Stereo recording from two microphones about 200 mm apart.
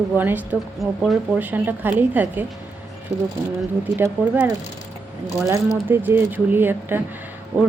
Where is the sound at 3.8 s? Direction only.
10° right (ahead or behind).